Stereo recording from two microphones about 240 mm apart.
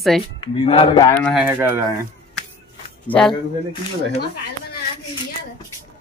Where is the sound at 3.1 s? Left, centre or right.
Centre.